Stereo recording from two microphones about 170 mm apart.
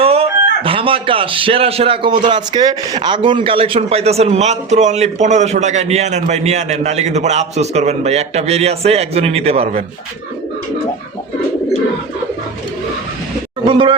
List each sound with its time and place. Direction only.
0.0 s a man's voice: 35° right (ahead or behind)
13.7 s speech: 30° right (ahead or behind)